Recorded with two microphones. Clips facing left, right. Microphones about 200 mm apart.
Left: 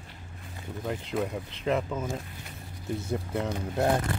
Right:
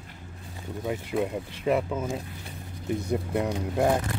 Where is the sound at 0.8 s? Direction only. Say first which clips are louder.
Right 3 dB; 5° right (ahead or behind).